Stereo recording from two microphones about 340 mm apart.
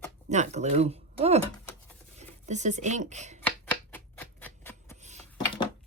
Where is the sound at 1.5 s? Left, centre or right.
Centre.